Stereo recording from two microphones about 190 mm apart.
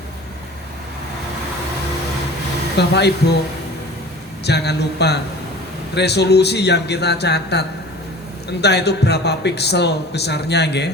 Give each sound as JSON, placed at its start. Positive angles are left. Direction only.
{"t": 2.7, "sound": "speech", "side_deg": 60}
{"t": 4.4, "sound": "speech", "side_deg": 60}
{"t": 8.6, "sound": "speech", "side_deg": 60}